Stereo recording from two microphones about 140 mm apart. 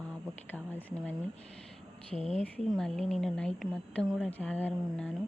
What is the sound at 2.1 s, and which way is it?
Speech, 50° left (ahead or behind).